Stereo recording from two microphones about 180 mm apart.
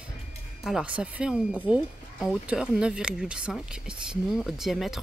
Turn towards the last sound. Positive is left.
turn(degrees=0)  # may be behind; listen again after turning